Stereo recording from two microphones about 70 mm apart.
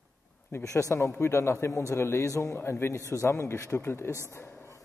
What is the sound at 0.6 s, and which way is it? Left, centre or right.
A man's voice, left.